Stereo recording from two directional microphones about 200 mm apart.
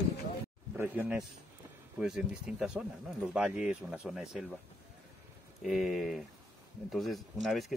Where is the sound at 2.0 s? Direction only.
Centre (ahead or behind).